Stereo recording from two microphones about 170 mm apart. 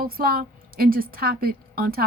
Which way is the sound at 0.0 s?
60° right (ahead or behind).